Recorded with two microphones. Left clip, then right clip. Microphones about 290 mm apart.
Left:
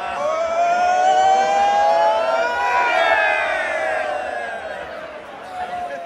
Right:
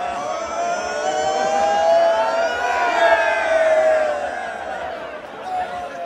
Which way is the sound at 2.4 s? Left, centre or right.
Centre.